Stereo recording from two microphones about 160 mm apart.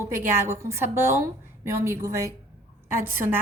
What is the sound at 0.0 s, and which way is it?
A woman's voice, 15° right (ahead or behind).